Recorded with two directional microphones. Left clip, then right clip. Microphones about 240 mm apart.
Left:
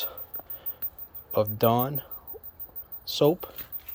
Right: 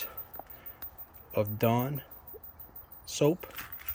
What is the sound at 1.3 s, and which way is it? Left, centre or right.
Speech, centre.